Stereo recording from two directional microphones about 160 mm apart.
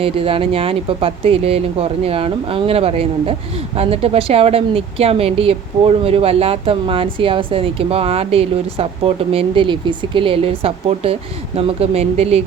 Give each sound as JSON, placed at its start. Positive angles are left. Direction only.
{"t": 0.0, "sound": "a woman's voice", "side_deg": -35}